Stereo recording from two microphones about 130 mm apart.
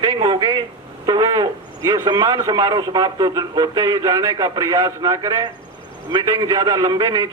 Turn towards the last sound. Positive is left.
turn(degrees=-30)  # may be behind; listen again after turning